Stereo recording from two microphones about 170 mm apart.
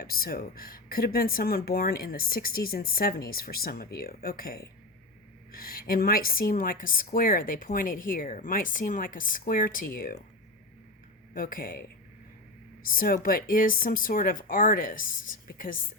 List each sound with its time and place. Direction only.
0.0 s speech: 65° left (ahead or behind)
11.3 s speech: 55° left (ahead or behind)
12.8 s speech: 55° left (ahead or behind)